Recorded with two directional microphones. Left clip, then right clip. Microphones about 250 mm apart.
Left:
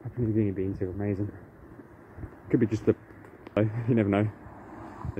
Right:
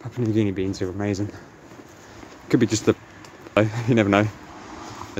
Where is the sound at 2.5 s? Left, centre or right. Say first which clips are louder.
Right 5 dB; centre.